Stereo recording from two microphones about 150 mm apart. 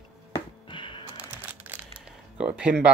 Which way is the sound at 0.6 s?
35° left (ahead or behind).